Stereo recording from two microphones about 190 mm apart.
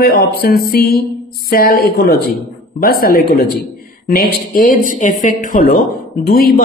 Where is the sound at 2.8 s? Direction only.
55° left (ahead or behind).